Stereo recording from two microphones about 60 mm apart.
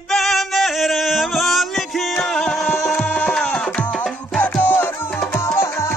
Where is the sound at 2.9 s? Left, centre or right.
Centre.